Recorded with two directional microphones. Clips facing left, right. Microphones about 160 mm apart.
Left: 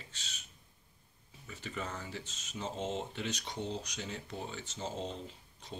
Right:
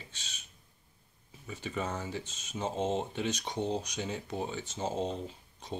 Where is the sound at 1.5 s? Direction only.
15° right (ahead or behind).